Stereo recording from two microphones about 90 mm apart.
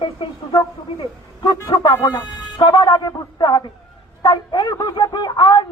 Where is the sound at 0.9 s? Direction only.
65° left (ahead or behind).